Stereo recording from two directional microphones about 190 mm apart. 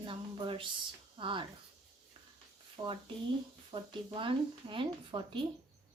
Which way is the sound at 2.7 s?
25° right (ahead or behind).